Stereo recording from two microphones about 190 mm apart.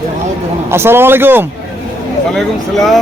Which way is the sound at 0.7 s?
10° right (ahead or behind).